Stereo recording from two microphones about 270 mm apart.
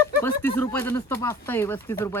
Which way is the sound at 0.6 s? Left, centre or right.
Centre.